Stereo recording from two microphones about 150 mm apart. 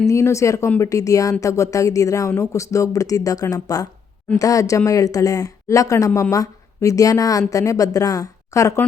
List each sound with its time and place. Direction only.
0.1 s speech: 20° left (ahead or behind)